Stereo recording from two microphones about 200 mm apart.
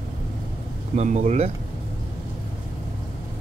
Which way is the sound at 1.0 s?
35° right (ahead or behind).